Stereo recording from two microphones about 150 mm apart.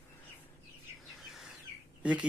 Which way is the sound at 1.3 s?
Centre (ahead or behind).